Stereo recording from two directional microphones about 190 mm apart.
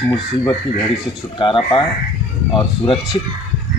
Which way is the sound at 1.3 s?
25° left (ahead or behind).